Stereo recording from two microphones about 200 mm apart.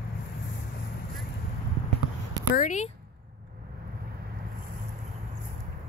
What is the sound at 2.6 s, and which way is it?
Speech, 40° left (ahead or behind).